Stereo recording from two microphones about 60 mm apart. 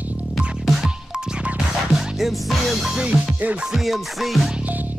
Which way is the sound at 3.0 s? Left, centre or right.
Right.